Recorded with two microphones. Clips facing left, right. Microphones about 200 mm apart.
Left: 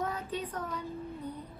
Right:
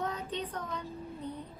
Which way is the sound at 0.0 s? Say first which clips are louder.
Left 1 dB; 10° left (ahead or behind).